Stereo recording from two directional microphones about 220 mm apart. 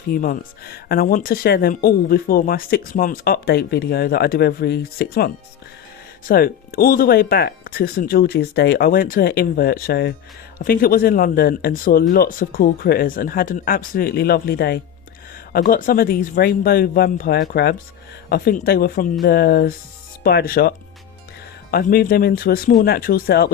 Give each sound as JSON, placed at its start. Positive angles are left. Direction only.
{"t": 0.1, "sound": "speech", "side_deg": 40}